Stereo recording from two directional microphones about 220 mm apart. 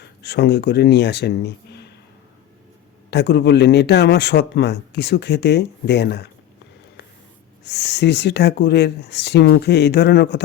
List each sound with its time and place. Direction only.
0.0 s speech: 50° left (ahead or behind)
3.1 s a man's voice: 50° left (ahead or behind)
7.6 s a man's voice: 50° left (ahead or behind)